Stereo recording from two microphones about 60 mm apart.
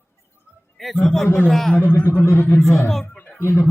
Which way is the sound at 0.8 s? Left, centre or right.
Centre.